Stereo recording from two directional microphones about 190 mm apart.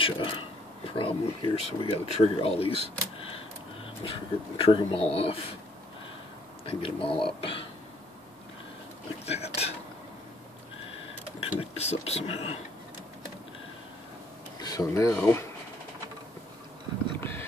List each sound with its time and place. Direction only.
0.0 s speech: 25° left (ahead or behind)
4.6 s speech: 30° left (ahead or behind)
6.6 s speech: 30° left (ahead or behind)
9.2 s a sound: 35° left (ahead or behind)
11.3 s speech: 30° left (ahead or behind)
14.6 s speech: 20° left (ahead or behind)
17.2 s clip-clop: 10° left (ahead or behind)